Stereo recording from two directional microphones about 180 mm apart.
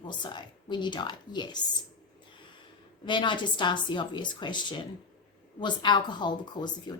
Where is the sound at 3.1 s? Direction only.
25° left (ahead or behind).